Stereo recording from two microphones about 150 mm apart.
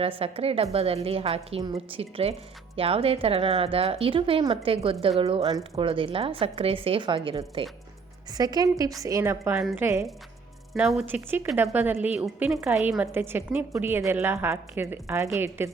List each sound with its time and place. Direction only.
0.0 s a woman's voice: 40° right (ahead or behind)
8.3 s a woman's voice: 25° right (ahead or behind)
9.6 s a woman's voice: 5° right (ahead or behind)
11.0 s a woman's voice: 15° right (ahead or behind)